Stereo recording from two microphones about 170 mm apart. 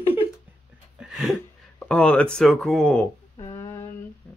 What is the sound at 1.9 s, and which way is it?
Speech, 5° left (ahead or behind).